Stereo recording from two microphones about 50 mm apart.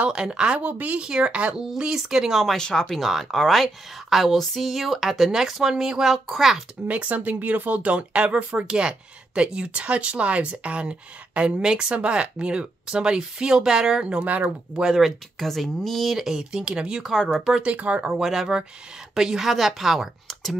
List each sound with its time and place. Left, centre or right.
0.1 s speech: centre
0.6 s speech: right
1.0 s speech: centre
2.5 s speech: centre
3.0 s a woman's voice: centre
6.9 s speech: right
14.2 s speech: right
14.8 s speech: centre
15.0 s a woman's voice: centre
16.2 s speech: centre
17.7 s speech: right
18.1 s a woman's voice: centre